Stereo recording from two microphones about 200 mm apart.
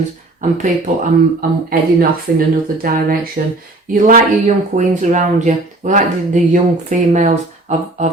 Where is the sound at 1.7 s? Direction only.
50° right (ahead or behind).